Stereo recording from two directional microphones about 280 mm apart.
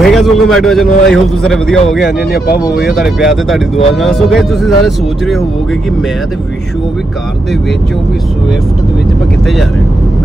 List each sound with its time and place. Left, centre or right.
0.0 s speech: centre
2.0 s speech: left
2.7 s speech: centre